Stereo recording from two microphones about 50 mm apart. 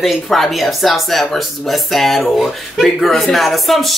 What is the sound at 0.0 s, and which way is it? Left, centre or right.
Speech, centre.